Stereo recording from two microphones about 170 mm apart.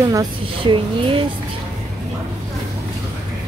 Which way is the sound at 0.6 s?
30° right (ahead or behind).